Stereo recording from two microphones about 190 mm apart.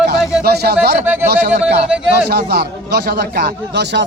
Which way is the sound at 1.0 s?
10° right (ahead or behind).